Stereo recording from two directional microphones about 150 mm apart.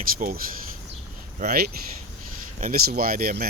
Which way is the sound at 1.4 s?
90° right.